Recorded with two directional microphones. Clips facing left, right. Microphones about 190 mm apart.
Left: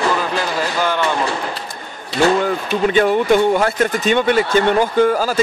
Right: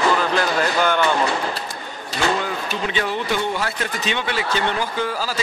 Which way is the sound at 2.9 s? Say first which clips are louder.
Left 11 dB; 50° left (ahead or behind).